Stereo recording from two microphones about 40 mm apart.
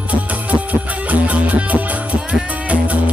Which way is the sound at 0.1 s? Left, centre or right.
Right.